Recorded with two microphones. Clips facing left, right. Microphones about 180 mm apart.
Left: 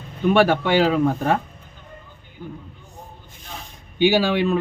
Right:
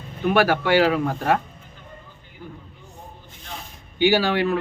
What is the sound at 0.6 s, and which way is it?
Speech, 20° left (ahead or behind).